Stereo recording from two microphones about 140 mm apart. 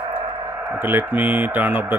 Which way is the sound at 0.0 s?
40° right (ahead or behind).